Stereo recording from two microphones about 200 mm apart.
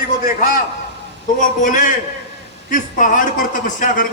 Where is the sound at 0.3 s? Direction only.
45° left (ahead or behind).